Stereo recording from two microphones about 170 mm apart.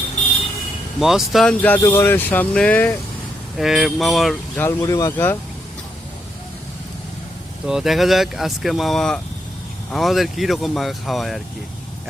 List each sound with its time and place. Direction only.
0.9 s speech: centre (ahead or behind)
1.6 s speech: 10° left (ahead or behind)
4.6 s speech: 20° left (ahead or behind)
7.7 s speech: centre (ahead or behind)